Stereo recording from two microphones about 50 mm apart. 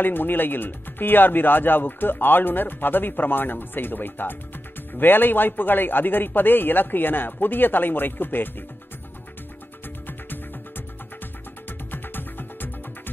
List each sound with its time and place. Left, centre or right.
0.0 s speech: left
11.9 s music: left